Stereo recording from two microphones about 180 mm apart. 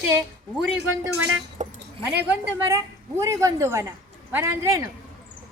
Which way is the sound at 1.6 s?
40° right (ahead or behind).